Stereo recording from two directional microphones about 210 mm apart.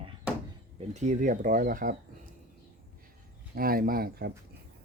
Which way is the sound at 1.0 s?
35° right (ahead or behind).